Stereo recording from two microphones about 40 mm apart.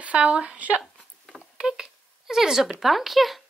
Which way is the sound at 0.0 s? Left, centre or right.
Right.